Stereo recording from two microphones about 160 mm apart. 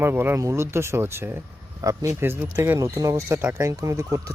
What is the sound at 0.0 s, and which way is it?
Speech, 15° right (ahead or behind).